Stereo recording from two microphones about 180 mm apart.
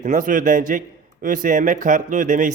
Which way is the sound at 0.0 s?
45° right (ahead or behind).